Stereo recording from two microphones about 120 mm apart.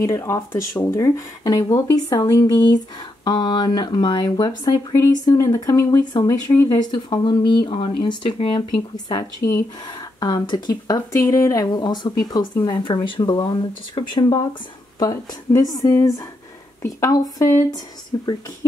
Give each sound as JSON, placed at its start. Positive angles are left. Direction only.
{"t": 0.0, "sound": "speech", "side_deg": 25}
{"t": 6.7, "sound": "speech", "side_deg": 35}
{"t": 9.4, "sound": "speech", "side_deg": 25}
{"t": 10.2, "sound": "speech", "side_deg": 40}
{"t": 11.1, "sound": "speech", "side_deg": 25}